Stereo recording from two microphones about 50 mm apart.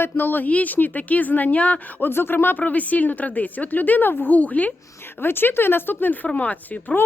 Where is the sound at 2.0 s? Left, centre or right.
Left.